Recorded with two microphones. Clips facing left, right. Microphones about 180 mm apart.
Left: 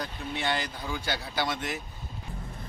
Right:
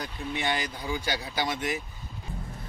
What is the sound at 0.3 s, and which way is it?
Speech, 15° right (ahead or behind).